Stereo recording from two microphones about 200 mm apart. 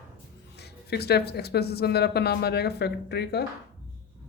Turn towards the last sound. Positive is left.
turn(degrees=55)  # may be behind; listen again after turning